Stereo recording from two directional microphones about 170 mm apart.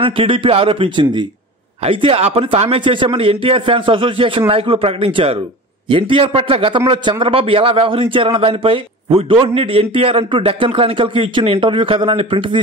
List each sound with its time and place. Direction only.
0.0 s a man's voice: 30° right (ahead or behind)